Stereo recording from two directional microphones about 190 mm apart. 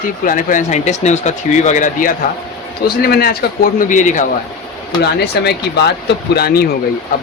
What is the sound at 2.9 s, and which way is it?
Speech, 55° left (ahead or behind).